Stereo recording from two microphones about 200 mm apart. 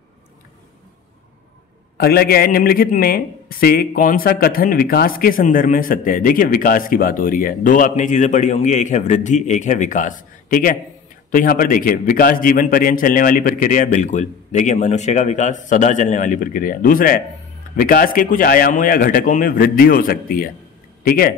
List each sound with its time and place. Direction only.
2.0 s a man's voice: 50° left (ahead or behind)